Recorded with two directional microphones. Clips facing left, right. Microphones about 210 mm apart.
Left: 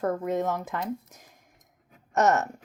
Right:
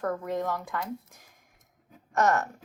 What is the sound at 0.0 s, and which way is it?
Speech, 20° left (ahead or behind).